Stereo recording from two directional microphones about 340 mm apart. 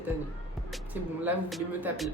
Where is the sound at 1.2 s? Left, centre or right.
Centre.